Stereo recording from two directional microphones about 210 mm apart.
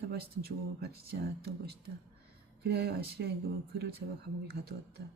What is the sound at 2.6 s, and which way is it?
Speech, 50° right (ahead or behind).